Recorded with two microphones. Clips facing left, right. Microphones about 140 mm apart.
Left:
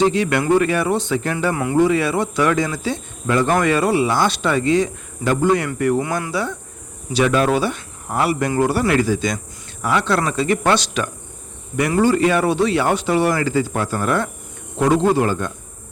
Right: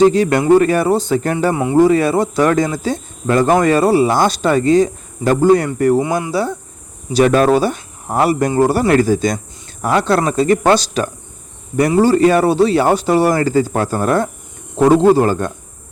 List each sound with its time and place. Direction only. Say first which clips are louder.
0.0 s speech: right 6 dB; 40° right (ahead or behind)
2.7 s cricket: right 4 dB; 45° right (ahead or behind)
3.6 s speech: right 5 dB; 40° right (ahead or behind)
6.0 s speech: right 5 dB; 20° right (ahead or behind)
6.3 s speech: right 5 dB; 35° right (ahead or behind)
8.9 s cricket: right 5 dB; 45° right (ahead or behind)
9.8 s speech: right 4 dB; 40° right (ahead or behind)